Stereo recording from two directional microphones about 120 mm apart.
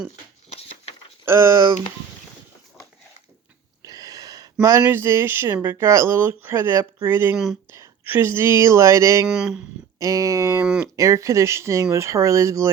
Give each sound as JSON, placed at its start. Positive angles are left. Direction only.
{"t": 1.2, "sound": "speech", "side_deg": -20}
{"t": 3.8, "sound": "a sound", "side_deg": -30}
{"t": 4.8, "sound": "a woman's voice", "side_deg": -20}
{"t": 9.2, "sound": "speech", "side_deg": -5}
{"t": 10.0, "sound": "speech", "side_deg": -30}
{"t": 10.6, "sound": "speech", "side_deg": -15}
{"t": 10.9, "sound": "speech", "side_deg": -25}